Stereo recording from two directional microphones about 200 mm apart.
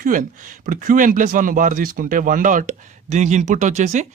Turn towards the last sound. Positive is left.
turn(degrees=-35)  # may be behind; listen again after turning